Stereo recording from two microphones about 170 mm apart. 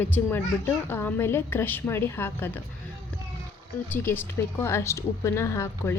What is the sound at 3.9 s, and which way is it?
A woman's voice, 10° left (ahead or behind).